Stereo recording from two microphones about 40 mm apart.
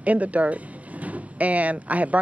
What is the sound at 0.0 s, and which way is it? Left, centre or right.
Speech, right.